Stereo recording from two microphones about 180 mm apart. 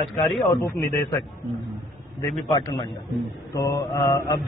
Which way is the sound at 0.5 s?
20° left (ahead or behind).